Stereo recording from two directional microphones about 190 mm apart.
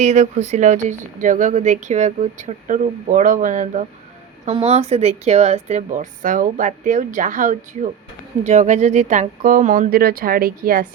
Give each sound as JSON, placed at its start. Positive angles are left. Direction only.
{"t": 0.0, "sound": "speech", "side_deg": -40}